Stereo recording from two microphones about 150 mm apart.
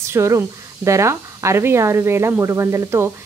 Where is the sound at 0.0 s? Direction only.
20° right (ahead or behind).